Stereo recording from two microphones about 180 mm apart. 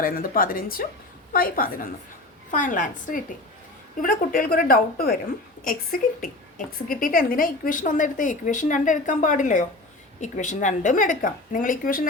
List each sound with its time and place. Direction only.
0.0 s speech: 55° left (ahead or behind)